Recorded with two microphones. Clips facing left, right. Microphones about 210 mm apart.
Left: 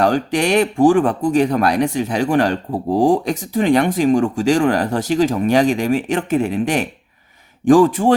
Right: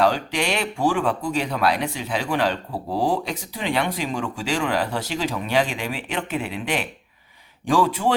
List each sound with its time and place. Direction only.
0.0 s speech: 45° left (ahead or behind)